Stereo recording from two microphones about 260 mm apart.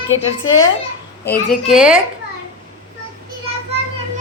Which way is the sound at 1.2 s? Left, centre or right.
Centre.